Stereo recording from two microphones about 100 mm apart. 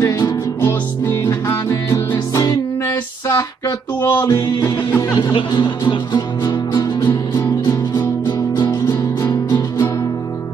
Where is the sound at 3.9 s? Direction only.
20° left (ahead or behind).